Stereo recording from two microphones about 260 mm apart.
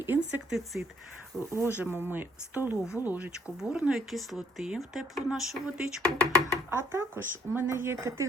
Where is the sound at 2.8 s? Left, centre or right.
Centre.